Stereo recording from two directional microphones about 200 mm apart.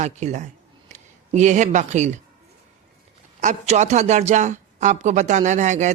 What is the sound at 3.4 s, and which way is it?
Speech, 35° right (ahead or behind).